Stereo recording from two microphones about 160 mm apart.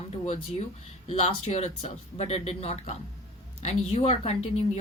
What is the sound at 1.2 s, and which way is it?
Speech, 40° left (ahead or behind).